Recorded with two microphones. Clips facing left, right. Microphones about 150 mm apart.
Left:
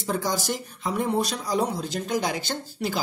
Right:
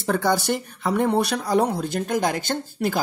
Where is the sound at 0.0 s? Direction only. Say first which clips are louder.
Right 5 dB; 60° right (ahead or behind).